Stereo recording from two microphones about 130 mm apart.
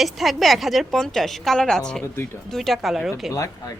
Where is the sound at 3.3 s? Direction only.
25° left (ahead or behind).